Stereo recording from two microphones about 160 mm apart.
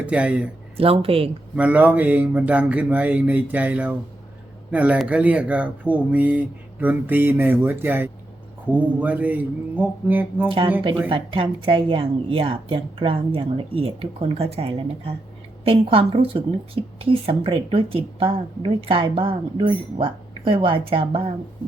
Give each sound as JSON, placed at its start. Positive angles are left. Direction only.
{"t": 0.0, "sound": "speech", "side_deg": -10}
{"t": 0.8, "sound": "a woman's voice", "side_deg": -35}
{"t": 1.5, "sound": "speech", "side_deg": -10}
{"t": 11.1, "sound": "a woman's voice", "side_deg": -35}